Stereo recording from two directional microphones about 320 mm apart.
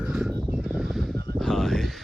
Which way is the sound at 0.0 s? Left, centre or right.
Centre.